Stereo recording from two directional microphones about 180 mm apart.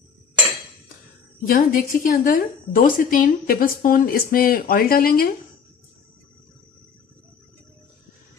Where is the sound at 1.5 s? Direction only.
50° left (ahead or behind).